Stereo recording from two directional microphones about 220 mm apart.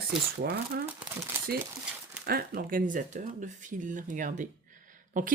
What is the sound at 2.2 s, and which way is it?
Speech, 45° right (ahead or behind).